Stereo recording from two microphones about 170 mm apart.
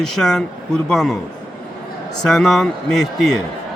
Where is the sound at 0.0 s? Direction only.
Centre (ahead or behind).